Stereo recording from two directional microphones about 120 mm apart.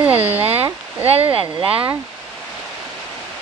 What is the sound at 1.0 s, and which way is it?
Speech, 55° right (ahead or behind).